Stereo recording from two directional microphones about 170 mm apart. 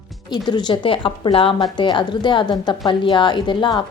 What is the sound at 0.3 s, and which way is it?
A woman's voice, 25° left (ahead or behind).